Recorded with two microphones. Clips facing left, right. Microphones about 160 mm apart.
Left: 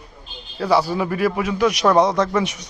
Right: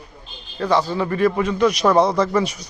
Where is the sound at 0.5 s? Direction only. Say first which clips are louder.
Left 1 dB; 10° left (ahead or behind).